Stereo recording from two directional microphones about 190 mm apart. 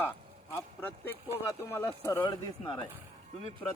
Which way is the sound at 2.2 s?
25° left (ahead or behind).